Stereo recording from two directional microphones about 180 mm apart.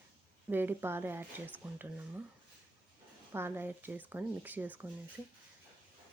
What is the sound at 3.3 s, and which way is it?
Speech, 10° right (ahead or behind).